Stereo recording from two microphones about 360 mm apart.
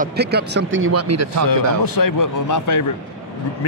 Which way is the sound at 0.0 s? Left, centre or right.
Right.